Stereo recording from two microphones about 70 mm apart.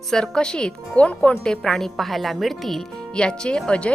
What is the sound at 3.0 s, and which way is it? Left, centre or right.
Speech, centre.